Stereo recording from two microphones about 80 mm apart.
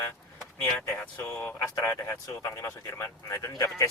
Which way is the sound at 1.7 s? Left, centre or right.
Left.